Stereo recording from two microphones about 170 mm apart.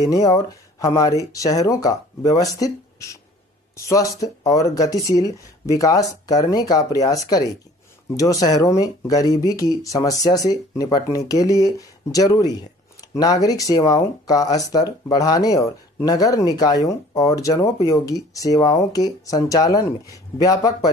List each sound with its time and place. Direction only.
0.0 s speech: 20° left (ahead or behind)